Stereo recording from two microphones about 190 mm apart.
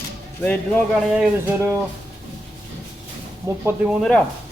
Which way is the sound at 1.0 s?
5° right (ahead or behind).